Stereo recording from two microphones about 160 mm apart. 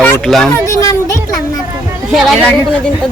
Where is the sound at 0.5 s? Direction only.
20° left (ahead or behind).